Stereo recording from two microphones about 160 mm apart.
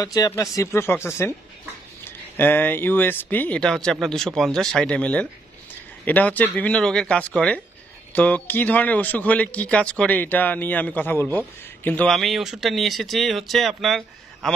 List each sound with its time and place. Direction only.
0.0 s speech: 25° left (ahead or behind); by 14.5 s centre (ahead or behind)